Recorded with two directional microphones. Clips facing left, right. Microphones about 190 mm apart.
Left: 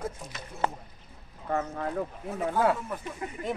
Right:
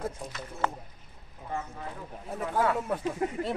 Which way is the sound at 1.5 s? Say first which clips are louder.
Left 7 dB; 60° left (ahead or behind).